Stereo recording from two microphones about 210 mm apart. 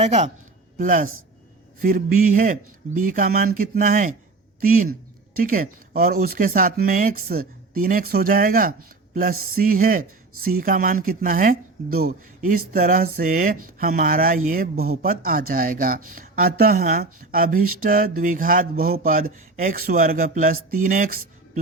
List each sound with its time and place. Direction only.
0.0 s a man's voice: 30° right (ahead or behind)